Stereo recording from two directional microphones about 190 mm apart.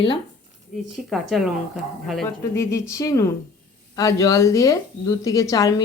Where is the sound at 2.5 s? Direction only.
15° left (ahead or behind).